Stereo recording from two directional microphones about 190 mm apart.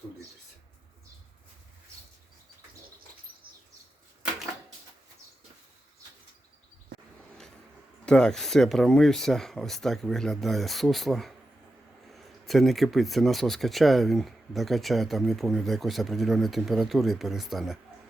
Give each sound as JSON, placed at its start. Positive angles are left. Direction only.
{"t": 8.0, "sound": "speech", "side_deg": 5}